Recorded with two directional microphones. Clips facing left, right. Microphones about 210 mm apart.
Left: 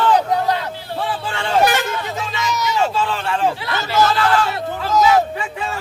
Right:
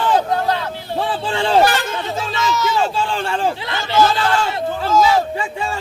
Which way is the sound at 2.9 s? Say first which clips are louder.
Even; 30° right (ahead or behind).